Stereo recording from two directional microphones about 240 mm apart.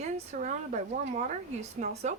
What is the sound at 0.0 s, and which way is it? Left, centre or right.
Speech, right.